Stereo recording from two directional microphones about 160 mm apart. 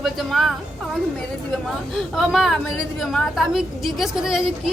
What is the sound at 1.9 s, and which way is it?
A woman's voice, centre (ahead or behind).